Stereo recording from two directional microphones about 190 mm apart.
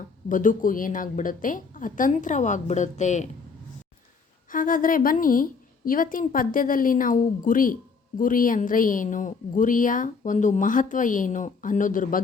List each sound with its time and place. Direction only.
0.3 s speech: 45° left (ahead or behind)
4.4 s speech: 45° left (ahead or behind)